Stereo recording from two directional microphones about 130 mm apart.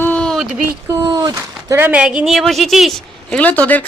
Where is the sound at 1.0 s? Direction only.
30° right (ahead or behind).